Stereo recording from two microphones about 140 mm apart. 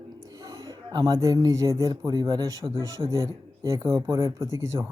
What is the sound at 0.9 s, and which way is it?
Speech, 25° right (ahead or behind).